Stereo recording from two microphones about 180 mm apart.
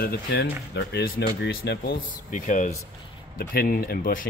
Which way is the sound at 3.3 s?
55° left (ahead or behind).